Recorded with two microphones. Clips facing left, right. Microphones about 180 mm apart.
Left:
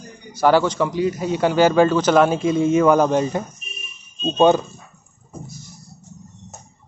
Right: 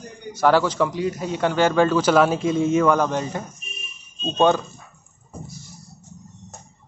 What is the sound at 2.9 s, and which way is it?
Speech, 15° left (ahead or behind).